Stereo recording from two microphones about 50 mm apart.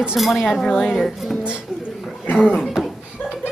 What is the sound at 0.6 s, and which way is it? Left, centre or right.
Speech, centre.